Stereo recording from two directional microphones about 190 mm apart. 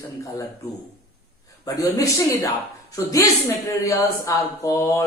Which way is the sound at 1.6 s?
20° left (ahead or behind).